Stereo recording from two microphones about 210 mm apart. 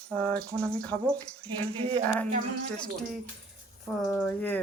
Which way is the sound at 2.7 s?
5° left (ahead or behind).